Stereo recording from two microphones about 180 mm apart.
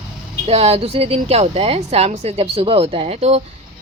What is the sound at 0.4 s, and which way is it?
Speech, 35° right (ahead or behind).